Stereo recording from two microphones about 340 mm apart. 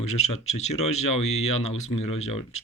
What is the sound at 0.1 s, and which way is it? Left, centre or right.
Speech, centre.